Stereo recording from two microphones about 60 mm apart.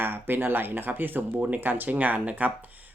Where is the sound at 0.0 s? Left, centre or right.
Right.